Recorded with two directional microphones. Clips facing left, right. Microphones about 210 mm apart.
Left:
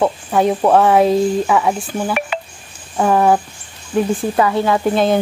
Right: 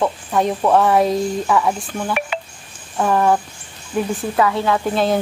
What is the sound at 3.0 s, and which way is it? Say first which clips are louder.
Speech: left 3 dB; 10° left (ahead or behind).